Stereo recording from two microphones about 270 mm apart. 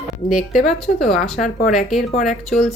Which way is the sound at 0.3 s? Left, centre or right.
Centre.